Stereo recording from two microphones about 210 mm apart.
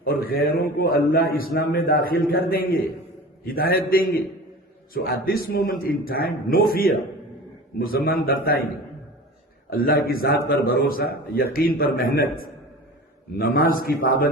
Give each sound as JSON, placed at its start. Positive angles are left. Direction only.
{"t": 0.0, "sound": "a man's voice", "side_deg": 45}
{"t": 5.2, "sound": "a man's voice", "side_deg": 45}
{"t": 9.6, "sound": "a man's voice", "side_deg": 45}